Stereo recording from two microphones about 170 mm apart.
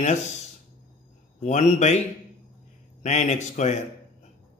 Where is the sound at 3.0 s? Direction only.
40° left (ahead or behind).